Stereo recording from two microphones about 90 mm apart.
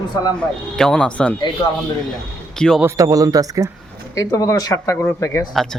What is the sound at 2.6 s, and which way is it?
Speech, 10° left (ahead or behind).